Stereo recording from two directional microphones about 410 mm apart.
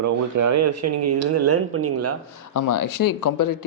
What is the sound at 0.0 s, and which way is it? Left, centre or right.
Speech, right.